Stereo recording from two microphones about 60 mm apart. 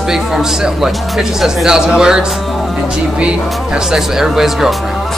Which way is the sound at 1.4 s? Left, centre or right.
Centre.